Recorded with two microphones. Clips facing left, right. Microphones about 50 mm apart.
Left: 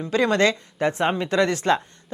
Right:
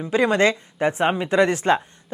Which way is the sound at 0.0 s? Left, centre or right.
Centre.